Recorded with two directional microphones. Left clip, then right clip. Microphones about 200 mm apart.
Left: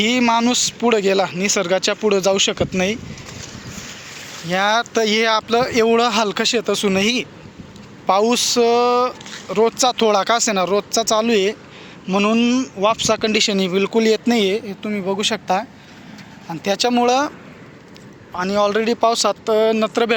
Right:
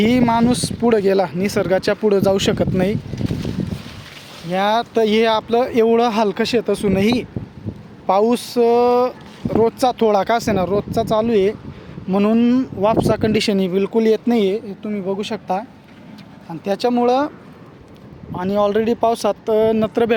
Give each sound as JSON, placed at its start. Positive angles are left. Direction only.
{"t": 0.0, "sound": "speech", "side_deg": -25}
{"t": 4.4, "sound": "speech", "side_deg": -10}
{"t": 12.0, "sound": "speech", "side_deg": -25}
{"t": 18.3, "sound": "speech", "side_deg": -20}